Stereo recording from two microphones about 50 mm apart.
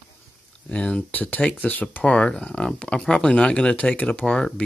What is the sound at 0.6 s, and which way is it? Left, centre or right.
Speech, left.